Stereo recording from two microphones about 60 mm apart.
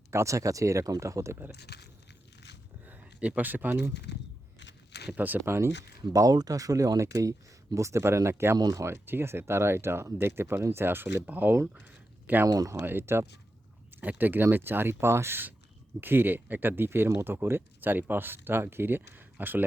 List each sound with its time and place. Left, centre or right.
0.1 s speech: right
2.8 s speech: right
5.1 s speech: right
5.5 s speech: right
6.1 s speech: right
8.5 s speech: right
8.8 s speech: right
11.8 s a sound: right
12.5 s speech: right
12.7 s speech: right
13.9 s speech: right